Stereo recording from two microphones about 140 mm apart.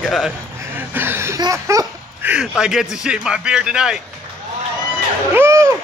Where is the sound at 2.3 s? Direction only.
5° right (ahead or behind).